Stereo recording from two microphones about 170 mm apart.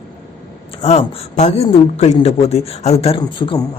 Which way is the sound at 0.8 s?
35° left (ahead or behind).